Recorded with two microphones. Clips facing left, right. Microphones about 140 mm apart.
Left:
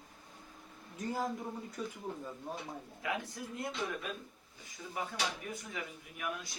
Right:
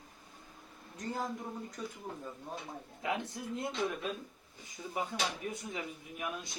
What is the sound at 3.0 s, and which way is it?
Speech, 25° right (ahead or behind).